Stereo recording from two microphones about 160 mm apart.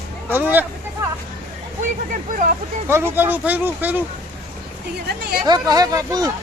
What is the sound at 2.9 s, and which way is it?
Speech, 15° right (ahead or behind).